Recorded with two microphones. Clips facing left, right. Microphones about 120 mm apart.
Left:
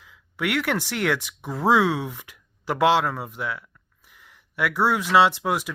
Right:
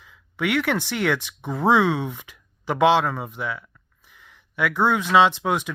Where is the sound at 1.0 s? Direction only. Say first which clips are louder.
Right 1 dB; 10° left (ahead or behind).